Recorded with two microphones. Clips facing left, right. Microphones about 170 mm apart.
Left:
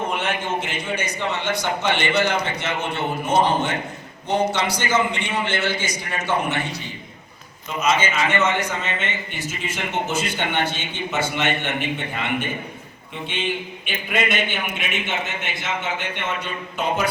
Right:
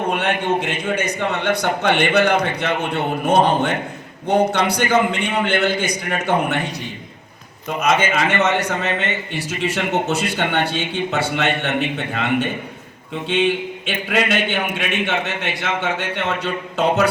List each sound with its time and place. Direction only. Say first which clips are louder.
0.1 s a man's voice: right 5 dB; 65° right (ahead or behind)
7.8 s a man's voice: right 3 dB; 60° right (ahead or behind)